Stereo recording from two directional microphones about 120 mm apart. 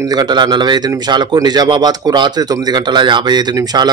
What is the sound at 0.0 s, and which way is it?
A man's voice, 35° right (ahead or behind).